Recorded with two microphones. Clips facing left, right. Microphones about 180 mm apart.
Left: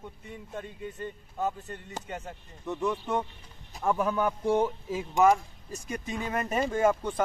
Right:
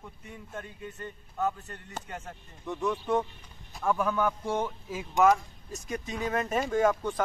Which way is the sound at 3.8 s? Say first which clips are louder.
Left 1 dB; 20° left (ahead or behind).